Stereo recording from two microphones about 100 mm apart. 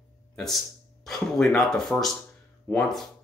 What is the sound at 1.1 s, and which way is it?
Speech, 5° left (ahead or behind).